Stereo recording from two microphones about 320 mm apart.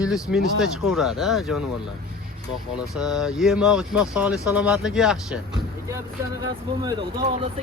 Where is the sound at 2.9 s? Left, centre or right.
Centre.